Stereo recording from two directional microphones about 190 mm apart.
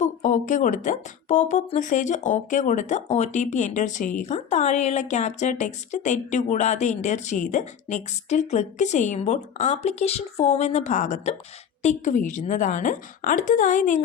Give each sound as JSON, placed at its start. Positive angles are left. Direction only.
{"t": 0.0, "sound": "a woman's voice", "side_deg": 40}